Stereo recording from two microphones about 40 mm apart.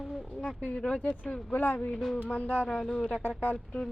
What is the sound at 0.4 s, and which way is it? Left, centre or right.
Speech, left.